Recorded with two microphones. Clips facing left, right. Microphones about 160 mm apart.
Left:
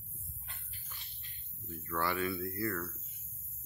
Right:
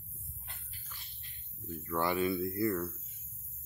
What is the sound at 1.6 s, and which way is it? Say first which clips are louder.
Speech: right 3 dB; 20° right (ahead or behind).